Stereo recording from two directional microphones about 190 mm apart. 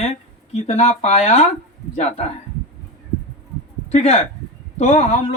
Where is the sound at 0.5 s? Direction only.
35° left (ahead or behind).